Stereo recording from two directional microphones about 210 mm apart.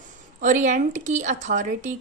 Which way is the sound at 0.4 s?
35° right (ahead or behind).